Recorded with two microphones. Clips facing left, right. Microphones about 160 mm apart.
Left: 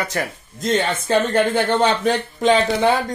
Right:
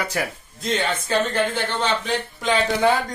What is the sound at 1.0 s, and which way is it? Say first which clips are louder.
Speech: left 4 dB; 55° left (ahead or behind).